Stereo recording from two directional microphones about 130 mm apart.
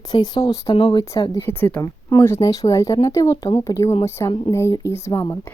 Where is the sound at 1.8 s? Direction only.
25° left (ahead or behind).